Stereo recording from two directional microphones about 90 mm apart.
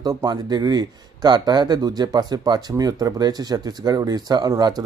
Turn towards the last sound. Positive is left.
turn(degrees=-50)  # may be behind; listen again after turning